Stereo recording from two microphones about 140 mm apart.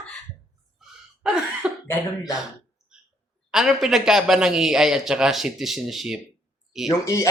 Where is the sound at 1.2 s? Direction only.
5° right (ahead or behind).